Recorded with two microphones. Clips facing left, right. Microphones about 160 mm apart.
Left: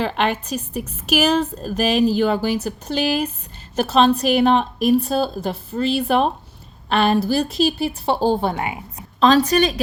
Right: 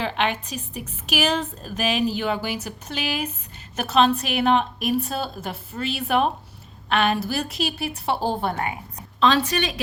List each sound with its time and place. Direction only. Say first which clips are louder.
0.0 s a woman's voice: left 4 dB; 40° left (ahead or behind)